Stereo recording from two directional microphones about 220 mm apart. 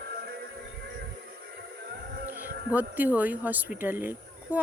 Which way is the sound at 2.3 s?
10° right (ahead or behind).